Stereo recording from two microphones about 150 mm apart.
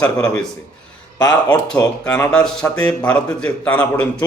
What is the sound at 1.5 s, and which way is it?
Speech, 5° left (ahead or behind).